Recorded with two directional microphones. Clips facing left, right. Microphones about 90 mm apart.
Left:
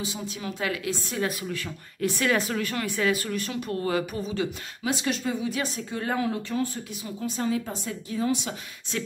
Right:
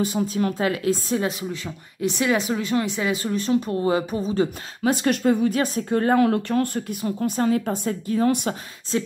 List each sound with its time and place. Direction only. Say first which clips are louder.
0.0 s a woman's voice: right 11 dB; 50° right (ahead or behind)
0.6 s a woman's voice: right 7 dB; 35° right (ahead or behind)
1.2 s speech: right 3 dB; 20° right (ahead or behind)
4.2 s a woman's voice: right 6 dB; 40° right (ahead or behind)
8.9 s speech: right 7 dB; 25° right (ahead or behind)